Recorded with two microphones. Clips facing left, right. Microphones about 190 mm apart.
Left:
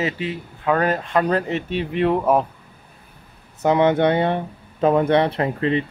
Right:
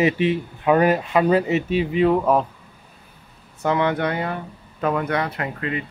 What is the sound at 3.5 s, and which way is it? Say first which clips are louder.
Speech: left 4 dB; 20° left (ahead or behind).